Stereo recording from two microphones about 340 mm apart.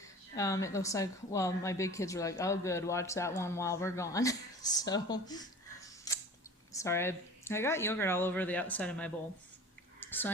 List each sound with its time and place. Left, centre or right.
0.3 s speech: centre
6.1 s a sound: centre
6.7 s speech: centre
10.0 s whispering: centre